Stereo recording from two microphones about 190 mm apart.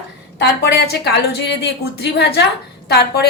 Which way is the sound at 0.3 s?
65° left (ahead or behind).